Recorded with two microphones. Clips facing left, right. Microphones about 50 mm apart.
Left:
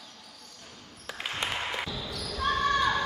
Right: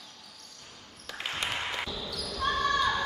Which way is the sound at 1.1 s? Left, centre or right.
Centre.